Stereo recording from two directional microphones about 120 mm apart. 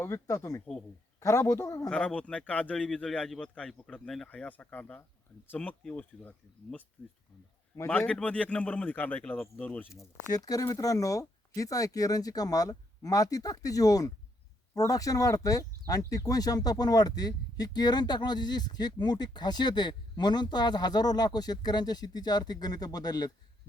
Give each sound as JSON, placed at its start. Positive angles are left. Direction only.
{"t": 0.0, "sound": "speech", "side_deg": 20}
{"t": 0.6, "sound": "speech", "side_deg": 5}
{"t": 1.2, "sound": "speech", "side_deg": 25}
{"t": 1.9, "sound": "speech", "side_deg": 10}
{"t": 7.9, "sound": "speech", "side_deg": 10}
{"t": 10.3, "sound": "speech", "side_deg": 30}